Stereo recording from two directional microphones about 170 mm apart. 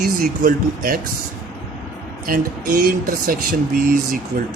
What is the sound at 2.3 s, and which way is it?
Speech, 55° right (ahead or behind).